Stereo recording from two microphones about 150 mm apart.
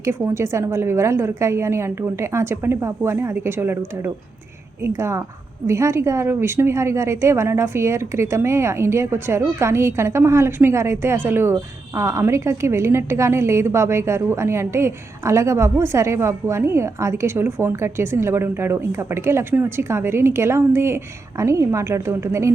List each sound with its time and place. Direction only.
0.0 s a woman's voice: 20° right (ahead or behind)